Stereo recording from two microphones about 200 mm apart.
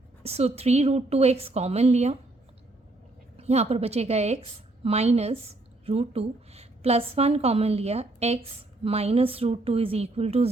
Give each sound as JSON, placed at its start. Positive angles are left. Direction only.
{"t": 0.2, "sound": "a woman's voice", "side_deg": -30}
{"t": 3.3, "sound": "a woman's voice", "side_deg": -30}